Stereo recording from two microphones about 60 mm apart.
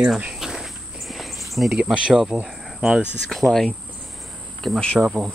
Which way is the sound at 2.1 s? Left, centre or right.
Centre.